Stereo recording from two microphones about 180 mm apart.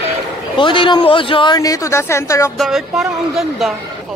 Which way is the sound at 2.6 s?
Centre (ahead or behind).